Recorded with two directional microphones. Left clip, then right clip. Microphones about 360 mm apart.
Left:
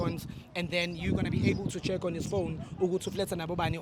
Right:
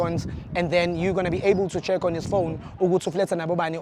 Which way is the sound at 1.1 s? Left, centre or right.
Right.